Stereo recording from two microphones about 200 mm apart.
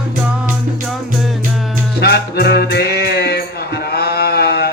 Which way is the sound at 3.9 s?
55° left (ahead or behind).